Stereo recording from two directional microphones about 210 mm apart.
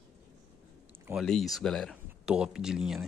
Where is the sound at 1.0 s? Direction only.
Centre (ahead or behind).